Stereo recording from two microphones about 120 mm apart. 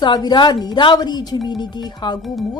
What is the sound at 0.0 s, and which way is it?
A woman's voice, 35° left (ahead or behind).